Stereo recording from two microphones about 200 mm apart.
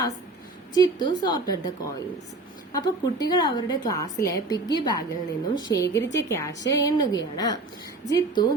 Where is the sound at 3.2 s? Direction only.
20° left (ahead or behind).